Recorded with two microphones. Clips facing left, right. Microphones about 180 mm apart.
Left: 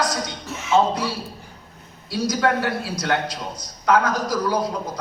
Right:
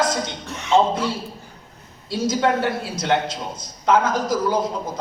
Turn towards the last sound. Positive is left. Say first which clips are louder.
# right 2 dB
turn(degrees=-25)  # may be behind; listen again after turning